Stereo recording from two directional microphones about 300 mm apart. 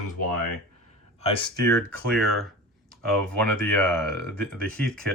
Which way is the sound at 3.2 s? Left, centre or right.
Centre.